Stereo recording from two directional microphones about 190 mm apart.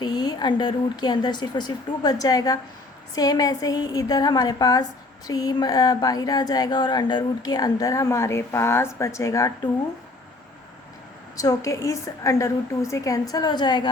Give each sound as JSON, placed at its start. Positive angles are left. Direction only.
{"t": 0.0, "sound": "speech", "side_deg": 20}
{"t": 11.3, "sound": "a woman's voice", "side_deg": 15}